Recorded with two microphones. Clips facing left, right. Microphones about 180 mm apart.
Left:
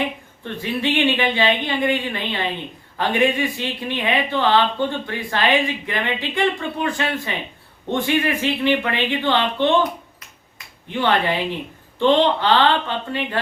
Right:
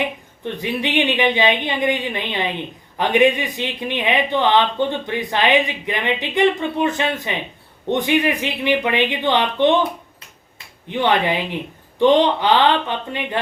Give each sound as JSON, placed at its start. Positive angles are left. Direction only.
{"t": 0.4, "sound": "speech", "side_deg": -15}
{"t": 11.0, "sound": "speech", "side_deg": -15}